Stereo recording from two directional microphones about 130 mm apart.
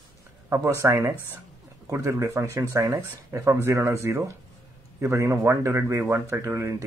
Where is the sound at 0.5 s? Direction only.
20° right (ahead or behind).